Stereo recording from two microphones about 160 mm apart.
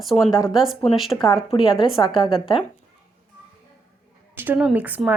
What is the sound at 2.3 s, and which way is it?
Speech, 35° left (ahead or behind).